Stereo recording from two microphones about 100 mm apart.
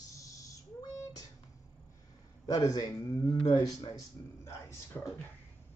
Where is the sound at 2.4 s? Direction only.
40° left (ahead or behind).